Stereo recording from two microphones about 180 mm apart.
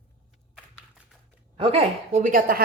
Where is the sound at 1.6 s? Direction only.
30° right (ahead or behind); by 2.6 s 50° right (ahead or behind).